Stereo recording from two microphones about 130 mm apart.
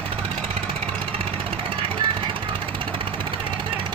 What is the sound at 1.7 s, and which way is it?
Jackhammer, 45° right (ahead or behind).